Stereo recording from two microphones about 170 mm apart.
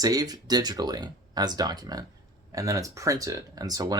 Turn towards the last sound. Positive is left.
turn(degrees=-20)  # may be behind; listen again after turning